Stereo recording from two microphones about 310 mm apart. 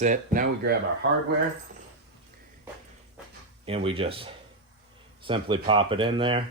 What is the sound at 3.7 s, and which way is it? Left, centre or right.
Speech, centre.